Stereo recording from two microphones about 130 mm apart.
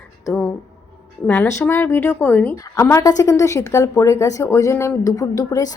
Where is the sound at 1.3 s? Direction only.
20° left (ahead or behind).